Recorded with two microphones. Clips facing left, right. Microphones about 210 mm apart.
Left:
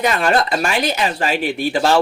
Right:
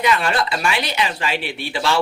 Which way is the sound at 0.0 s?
45° left (ahead or behind).